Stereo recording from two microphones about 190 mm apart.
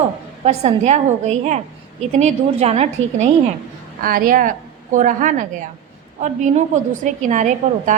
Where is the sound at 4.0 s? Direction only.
50° right (ahead or behind).